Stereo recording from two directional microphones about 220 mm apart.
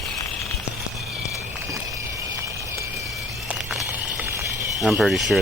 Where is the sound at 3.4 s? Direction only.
5° right (ahead or behind).